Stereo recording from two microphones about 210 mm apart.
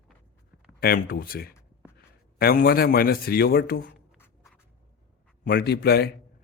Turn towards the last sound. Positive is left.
turn(degrees=50)  # may be behind; listen again after turning